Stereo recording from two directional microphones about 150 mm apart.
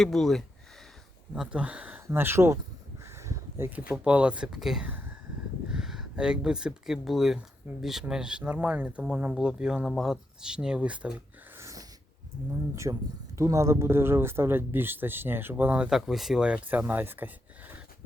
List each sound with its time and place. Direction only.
0.0 s speech: centre (ahead or behind)
11.5 s sneeze: 20° right (ahead or behind)
12.7 s speech: 20° right (ahead or behind)